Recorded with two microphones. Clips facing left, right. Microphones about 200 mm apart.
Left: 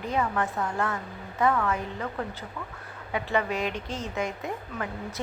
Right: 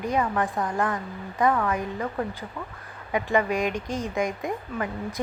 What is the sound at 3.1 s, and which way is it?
Speech, 15° right (ahead or behind).